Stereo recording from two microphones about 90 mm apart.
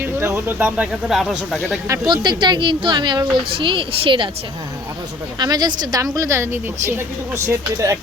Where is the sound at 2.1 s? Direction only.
55° right (ahead or behind).